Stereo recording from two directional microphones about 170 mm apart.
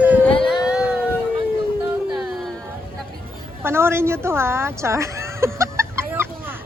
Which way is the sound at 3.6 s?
15° right (ahead or behind).